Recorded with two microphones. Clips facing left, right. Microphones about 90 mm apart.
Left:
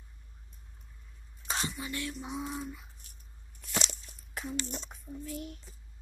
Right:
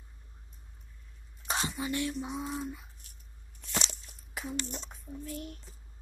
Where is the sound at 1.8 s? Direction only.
25° right (ahead or behind).